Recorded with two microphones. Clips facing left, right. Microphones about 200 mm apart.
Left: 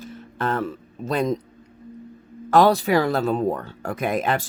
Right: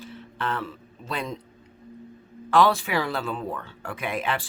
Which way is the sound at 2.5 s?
40° left (ahead or behind).